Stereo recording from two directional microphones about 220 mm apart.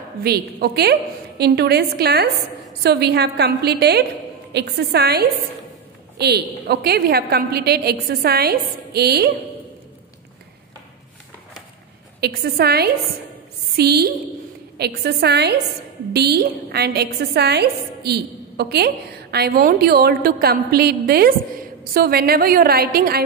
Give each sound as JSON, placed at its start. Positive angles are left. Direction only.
{"t": 0.2, "sound": "a woman's voice", "side_deg": -45}
{"t": 12.2, "sound": "a woman's voice", "side_deg": -45}